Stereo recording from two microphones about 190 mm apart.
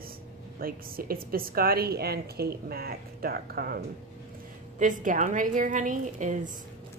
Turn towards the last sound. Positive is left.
turn(degrees=-40)  # may be behind; listen again after turning